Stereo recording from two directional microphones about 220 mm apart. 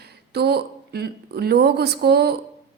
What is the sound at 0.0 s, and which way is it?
Speech, 45° right (ahead or behind).